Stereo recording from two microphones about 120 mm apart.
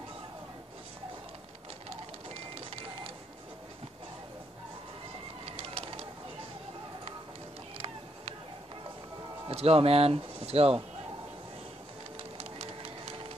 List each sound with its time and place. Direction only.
1.9 s vehicle: 55° right (ahead or behind)
5.4 s bird: 50° right (ahead or behind)
7.7 s music: 50° right (ahead or behind)
9.5 s speech: 55° right (ahead or behind)
12.4 s music: 50° right (ahead or behind)